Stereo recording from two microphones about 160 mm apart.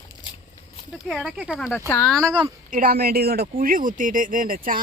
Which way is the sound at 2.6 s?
60° right (ahead or behind).